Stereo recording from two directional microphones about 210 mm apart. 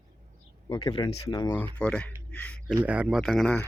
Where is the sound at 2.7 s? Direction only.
5° right (ahead or behind).